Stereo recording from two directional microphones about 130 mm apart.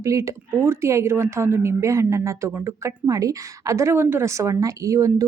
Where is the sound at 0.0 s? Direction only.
25° right (ahead or behind).